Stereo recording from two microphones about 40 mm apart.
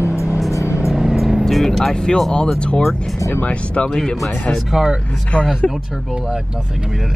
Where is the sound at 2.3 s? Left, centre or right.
Left.